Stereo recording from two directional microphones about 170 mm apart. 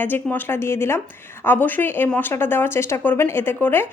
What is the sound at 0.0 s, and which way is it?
A woman's voice, 10° left (ahead or behind).